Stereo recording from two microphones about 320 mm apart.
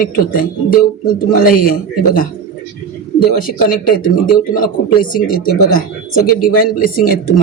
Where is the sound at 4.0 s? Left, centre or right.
Left.